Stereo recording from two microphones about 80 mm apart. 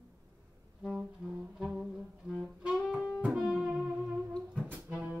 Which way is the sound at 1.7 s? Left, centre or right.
Centre.